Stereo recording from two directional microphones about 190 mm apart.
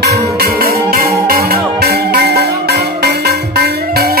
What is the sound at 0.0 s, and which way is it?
Music, 55° right (ahead or behind).